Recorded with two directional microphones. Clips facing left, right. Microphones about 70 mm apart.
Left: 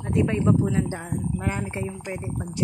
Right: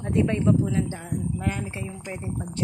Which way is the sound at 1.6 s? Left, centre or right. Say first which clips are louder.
Left 3 dB; left.